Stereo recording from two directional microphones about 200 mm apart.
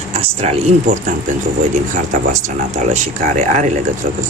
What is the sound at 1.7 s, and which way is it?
Speech, 35° right (ahead or behind).